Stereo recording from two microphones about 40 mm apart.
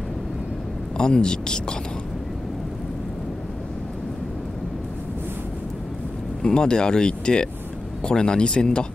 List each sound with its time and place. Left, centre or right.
0.9 s speech: centre
6.4 s speech: centre